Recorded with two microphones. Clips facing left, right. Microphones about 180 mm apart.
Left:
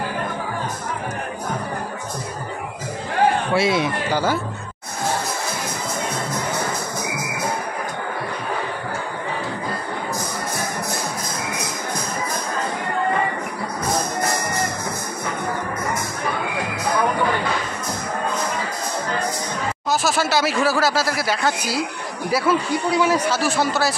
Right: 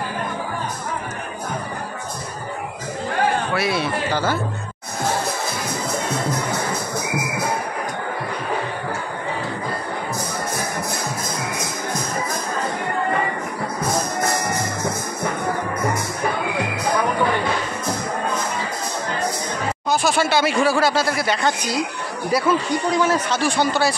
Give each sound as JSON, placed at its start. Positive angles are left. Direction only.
{"t": 3.5, "sound": "speech", "side_deg": 20}
{"t": 19.9, "sound": "speech", "side_deg": 0}